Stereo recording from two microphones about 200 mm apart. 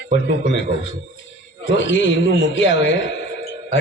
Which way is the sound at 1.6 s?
65° left (ahead or behind).